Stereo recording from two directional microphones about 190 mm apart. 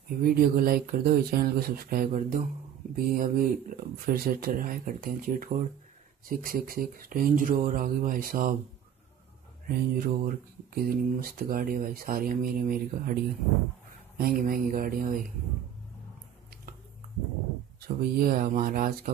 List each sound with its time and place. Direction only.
0.2 s speech: 50° right (ahead or behind)
9.7 s speech: 50° right (ahead or behind)
17.7 s speech: 50° right (ahead or behind)